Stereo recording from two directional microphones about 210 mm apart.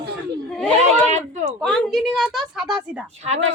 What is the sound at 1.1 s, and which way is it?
Speech, 35° right (ahead or behind).